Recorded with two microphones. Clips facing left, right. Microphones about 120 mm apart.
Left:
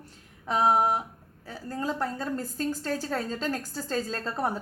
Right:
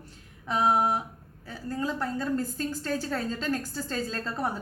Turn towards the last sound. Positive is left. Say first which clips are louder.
# left 1 dB
turn(degrees=35)  # may be behind; listen again after turning